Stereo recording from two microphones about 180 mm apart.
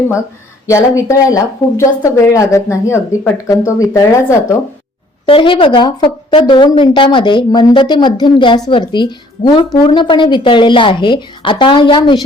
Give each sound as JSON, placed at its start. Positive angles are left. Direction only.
{"t": 0.7, "sound": "speech", "side_deg": 15}
{"t": 5.2, "sound": "a woman's voice", "side_deg": 30}